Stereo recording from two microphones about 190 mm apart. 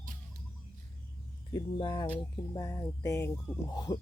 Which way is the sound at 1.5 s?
20° left (ahead or behind).